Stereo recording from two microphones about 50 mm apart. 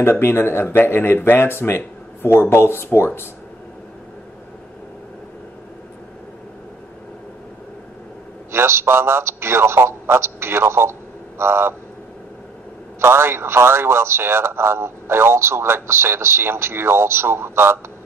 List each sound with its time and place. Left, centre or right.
0.0 s speech: left
8.5 s speech: right
13.0 s speech: right